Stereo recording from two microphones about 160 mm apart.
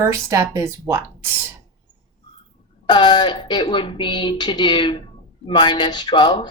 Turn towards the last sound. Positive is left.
turn(degrees=30)  # may be behind; listen again after turning